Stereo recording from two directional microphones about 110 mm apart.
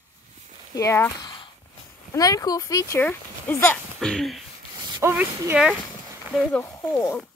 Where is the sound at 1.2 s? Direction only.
50° left (ahead or behind).